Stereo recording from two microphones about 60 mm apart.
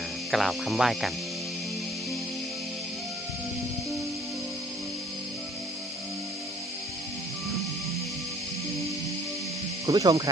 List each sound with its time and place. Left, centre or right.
0.3 s speech: centre
9.8 s speech: right